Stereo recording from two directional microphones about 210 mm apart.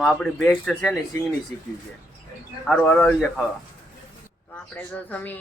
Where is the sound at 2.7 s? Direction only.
5° left (ahead or behind).